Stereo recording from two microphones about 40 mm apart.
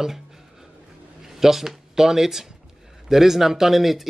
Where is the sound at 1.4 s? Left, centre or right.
Centre.